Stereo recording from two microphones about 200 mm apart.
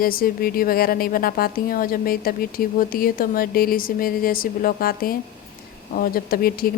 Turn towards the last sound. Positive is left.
turn(degrees=50)  # may be behind; listen again after turning